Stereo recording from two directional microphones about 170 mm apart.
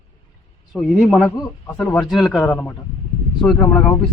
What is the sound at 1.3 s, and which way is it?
Speech, 25° left (ahead or behind).